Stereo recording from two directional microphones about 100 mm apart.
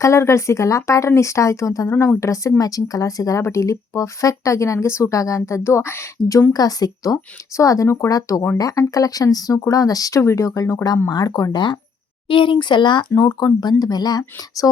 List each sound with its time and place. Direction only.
0.0 s speech: 30° left (ahead or behind)